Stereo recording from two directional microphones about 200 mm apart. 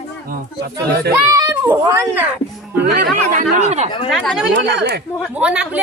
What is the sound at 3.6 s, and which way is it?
Speech, 35° right (ahead or behind).